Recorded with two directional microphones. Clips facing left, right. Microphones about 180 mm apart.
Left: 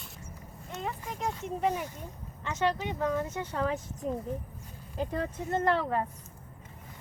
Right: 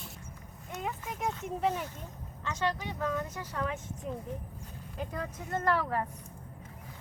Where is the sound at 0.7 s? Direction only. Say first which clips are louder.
Left 1 dB; 5° right (ahead or behind).